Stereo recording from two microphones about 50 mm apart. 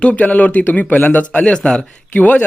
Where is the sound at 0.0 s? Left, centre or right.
Left.